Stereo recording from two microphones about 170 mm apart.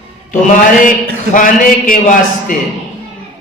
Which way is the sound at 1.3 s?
50° left (ahead or behind).